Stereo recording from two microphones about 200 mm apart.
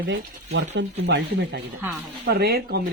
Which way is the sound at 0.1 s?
60° right (ahead or behind).